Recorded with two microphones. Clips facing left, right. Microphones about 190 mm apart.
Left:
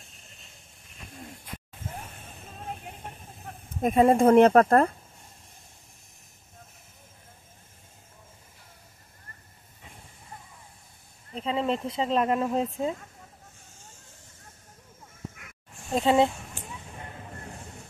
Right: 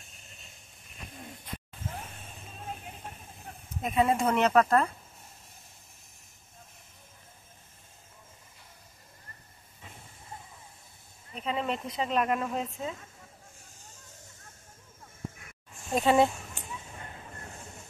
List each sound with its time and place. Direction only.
3.8 s speech: 50° left (ahead or behind)
11.3 s speech: 25° left (ahead or behind)
15.9 s speech: 25° left (ahead or behind)